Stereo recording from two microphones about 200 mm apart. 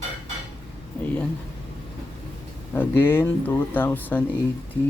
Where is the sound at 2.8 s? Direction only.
10° left (ahead or behind).